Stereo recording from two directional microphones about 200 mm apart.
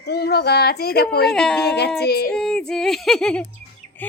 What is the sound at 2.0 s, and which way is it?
Speech, 55° left (ahead or behind).